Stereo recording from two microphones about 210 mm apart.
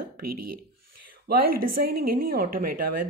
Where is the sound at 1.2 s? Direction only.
45° right (ahead or behind).